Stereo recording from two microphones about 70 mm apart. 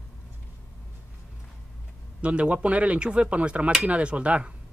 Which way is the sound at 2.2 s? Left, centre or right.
Centre.